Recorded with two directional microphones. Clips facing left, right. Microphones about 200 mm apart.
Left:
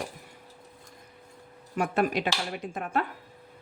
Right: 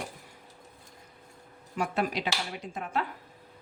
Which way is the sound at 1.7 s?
55° left (ahead or behind).